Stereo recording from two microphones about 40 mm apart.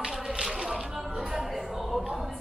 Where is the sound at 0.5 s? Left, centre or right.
Right.